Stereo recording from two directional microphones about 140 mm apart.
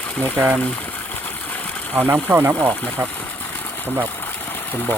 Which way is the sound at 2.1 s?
15° right (ahead or behind).